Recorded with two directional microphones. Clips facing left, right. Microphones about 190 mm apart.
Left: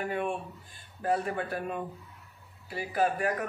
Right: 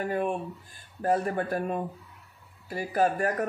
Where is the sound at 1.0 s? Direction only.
45° right (ahead or behind).